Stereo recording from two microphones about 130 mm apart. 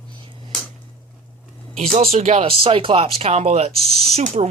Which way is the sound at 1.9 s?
55° right (ahead or behind).